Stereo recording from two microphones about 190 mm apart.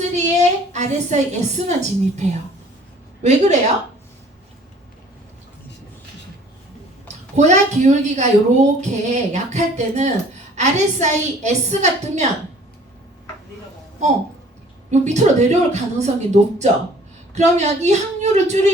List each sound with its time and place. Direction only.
0.1 s a woman's voice: 40° right (ahead or behind)
7.3 s a woman's voice: 40° right (ahead or behind)
14.8 s a woman's voice: 40° right (ahead or behind)